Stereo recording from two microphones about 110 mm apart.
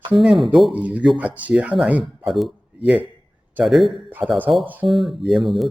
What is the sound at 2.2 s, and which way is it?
Speech, centre (ahead or behind).